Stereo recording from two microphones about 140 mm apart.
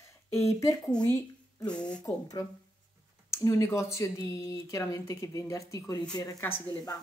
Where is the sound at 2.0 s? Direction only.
25° left (ahead or behind).